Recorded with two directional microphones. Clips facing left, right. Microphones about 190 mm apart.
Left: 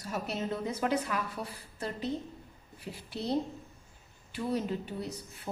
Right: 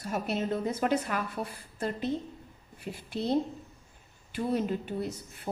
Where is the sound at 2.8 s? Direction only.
55° right (ahead or behind).